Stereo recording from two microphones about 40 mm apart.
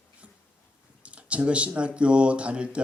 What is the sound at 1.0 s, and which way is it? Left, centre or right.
A man's voice, right.